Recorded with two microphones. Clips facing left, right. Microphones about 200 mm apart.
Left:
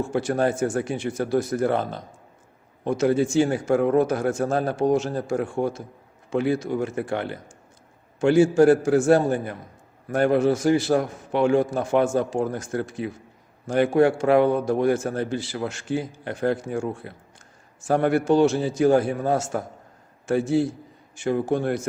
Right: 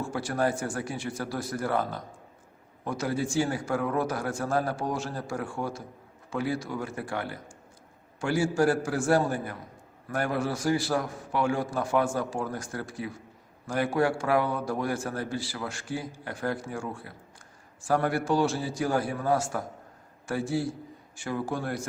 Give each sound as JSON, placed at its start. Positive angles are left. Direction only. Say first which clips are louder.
{"t": 0.0, "sound": "a man's voice", "louder": "left 6 dB", "side_deg": 20}